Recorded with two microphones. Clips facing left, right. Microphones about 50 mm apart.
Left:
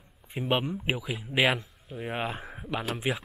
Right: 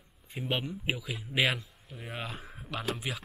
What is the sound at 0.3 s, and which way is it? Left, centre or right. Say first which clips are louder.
Speech: left 6 dB; left.